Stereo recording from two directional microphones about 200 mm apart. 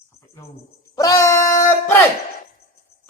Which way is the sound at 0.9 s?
15° left (ahead or behind).